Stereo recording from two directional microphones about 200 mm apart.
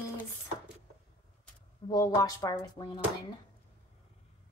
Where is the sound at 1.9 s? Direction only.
20° left (ahead or behind).